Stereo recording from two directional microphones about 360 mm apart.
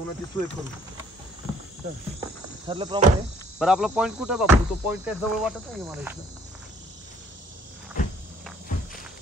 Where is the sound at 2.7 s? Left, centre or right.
Centre.